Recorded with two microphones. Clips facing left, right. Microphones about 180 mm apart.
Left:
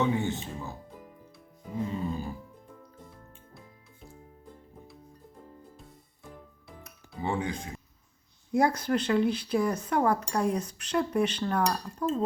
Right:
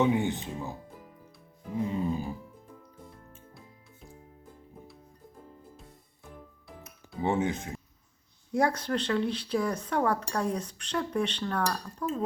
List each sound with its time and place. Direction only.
0.0 s speech: 15° right (ahead or behind)
1.8 s speech: 15° right (ahead or behind)
6.2 s music: centre (ahead or behind)
7.2 s speech: 20° right (ahead or behind)
8.5 s speech: 10° left (ahead or behind)